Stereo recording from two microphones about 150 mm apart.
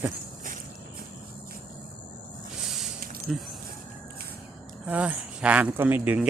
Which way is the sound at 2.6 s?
Centre (ahead or behind).